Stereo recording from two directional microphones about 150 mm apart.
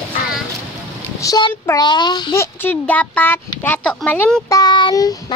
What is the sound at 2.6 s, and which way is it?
Speech, 10° left (ahead or behind).